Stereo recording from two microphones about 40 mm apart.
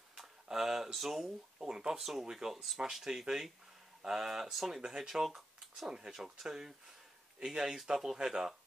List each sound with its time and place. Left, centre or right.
0.2 s a sound: centre
0.9 s speech: centre
1.7 s speech: centre
2.0 s speech: centre
5.2 s a sound: centre
5.9 s speech: centre